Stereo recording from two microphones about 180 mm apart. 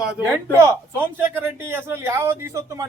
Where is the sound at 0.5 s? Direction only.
15° right (ahead or behind).